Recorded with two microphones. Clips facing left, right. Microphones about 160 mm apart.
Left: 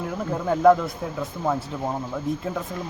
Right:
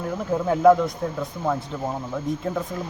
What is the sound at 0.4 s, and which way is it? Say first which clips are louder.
Speech: right 1 dB; centre (ahead or behind).